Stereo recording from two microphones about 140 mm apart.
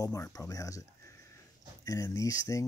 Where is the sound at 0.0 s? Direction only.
25° left (ahead or behind).